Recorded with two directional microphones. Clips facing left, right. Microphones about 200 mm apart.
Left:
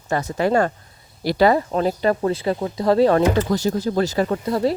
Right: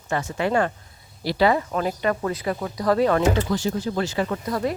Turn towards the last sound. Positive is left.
turn(degrees=30)  # may be behind; listen again after turning